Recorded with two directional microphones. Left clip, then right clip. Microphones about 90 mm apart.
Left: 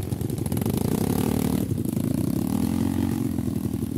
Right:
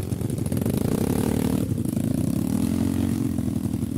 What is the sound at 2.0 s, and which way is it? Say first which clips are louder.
Vehicle: even; 10° left (ahead or behind).